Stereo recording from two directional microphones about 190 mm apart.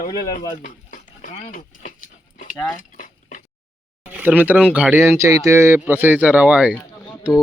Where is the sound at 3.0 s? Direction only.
45° left (ahead or behind).